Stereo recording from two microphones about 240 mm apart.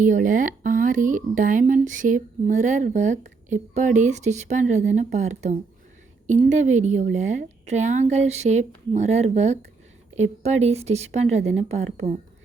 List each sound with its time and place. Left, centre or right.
0.0 s a woman's voice: right